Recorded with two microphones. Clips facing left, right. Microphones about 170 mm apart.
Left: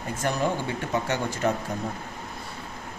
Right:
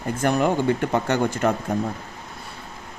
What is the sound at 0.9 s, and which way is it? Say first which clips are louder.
Speech: right 5 dB; 60° right (ahead or behind).